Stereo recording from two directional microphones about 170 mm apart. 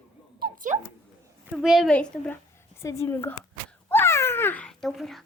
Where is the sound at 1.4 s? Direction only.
5° right (ahead or behind).